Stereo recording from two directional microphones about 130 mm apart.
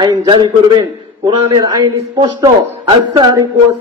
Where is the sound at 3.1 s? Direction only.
30° right (ahead or behind).